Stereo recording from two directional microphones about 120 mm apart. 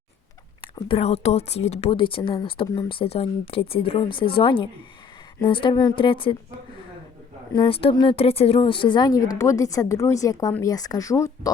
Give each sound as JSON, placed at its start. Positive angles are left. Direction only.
{"t": 0.9, "sound": "speech", "side_deg": 60}
{"t": 1.9, "sound": "a woman's voice", "side_deg": 45}
{"t": 2.3, "sound": "speech", "side_deg": 35}
{"t": 2.9, "sound": "a woman's voice", "side_deg": 55}
{"t": 7.7, "sound": "speech", "side_deg": 50}